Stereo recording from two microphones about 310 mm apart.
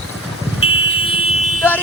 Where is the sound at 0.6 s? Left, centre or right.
Centre.